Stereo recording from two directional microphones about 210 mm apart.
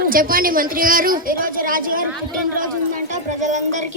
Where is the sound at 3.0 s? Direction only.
35° right (ahead or behind).